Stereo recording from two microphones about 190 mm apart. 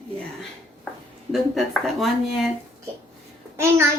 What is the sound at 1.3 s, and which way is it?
Speech, centre (ahead or behind).